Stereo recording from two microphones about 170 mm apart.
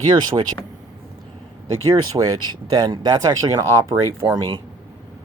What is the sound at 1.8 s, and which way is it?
Speech, 25° right (ahead or behind).